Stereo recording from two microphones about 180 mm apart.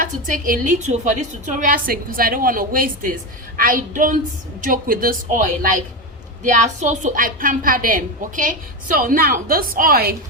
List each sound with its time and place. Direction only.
0.0 s a woman's voice: 50° right (ahead or behind)
6.5 s a woman's voice: 40° right (ahead or behind)